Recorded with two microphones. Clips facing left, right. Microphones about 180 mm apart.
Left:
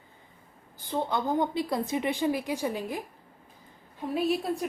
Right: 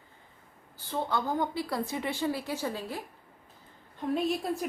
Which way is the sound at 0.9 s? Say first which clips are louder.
Left 2 dB; 20° left (ahead or behind).